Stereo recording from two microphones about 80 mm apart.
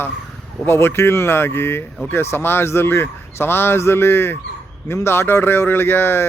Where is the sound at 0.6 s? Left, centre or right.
Left.